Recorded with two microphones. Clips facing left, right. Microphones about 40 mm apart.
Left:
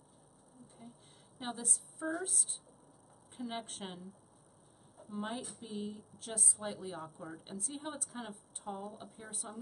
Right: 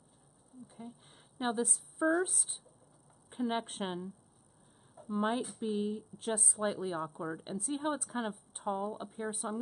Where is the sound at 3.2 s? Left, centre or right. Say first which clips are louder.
Right 7 dB; right.